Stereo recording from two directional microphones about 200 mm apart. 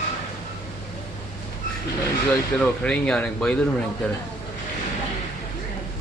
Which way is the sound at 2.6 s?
5° left (ahead or behind).